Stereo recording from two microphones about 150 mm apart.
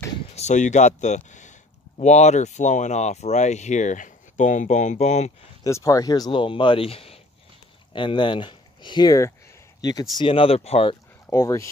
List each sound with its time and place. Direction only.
0.4 s speech: 50° left (ahead or behind)
5.6 s speech: 20° left (ahead or behind)
10.1 s speech: 35° left (ahead or behind)
11.2 s speech: 20° left (ahead or behind)